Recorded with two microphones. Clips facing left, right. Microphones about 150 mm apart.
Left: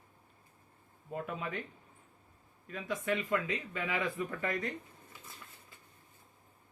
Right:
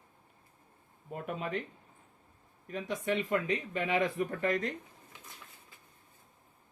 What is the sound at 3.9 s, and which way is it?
Speech, 40° right (ahead or behind).